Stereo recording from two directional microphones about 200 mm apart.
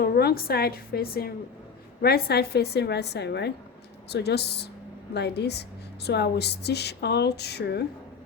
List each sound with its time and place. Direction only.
0.0 s a woman's voice: 50° left (ahead or behind)